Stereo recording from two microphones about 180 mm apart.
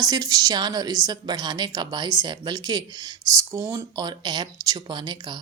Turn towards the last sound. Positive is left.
turn(degrees=-25)  # may be behind; listen again after turning